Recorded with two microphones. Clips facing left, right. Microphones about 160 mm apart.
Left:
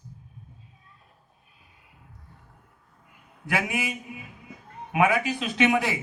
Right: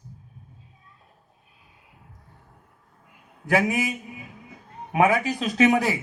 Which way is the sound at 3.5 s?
40° right (ahead or behind).